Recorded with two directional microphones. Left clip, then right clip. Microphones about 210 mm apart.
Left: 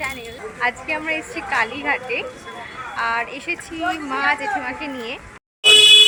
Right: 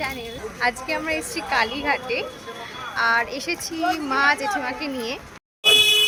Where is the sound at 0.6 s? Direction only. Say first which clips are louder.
Left 1 dB; 5° right (ahead or behind).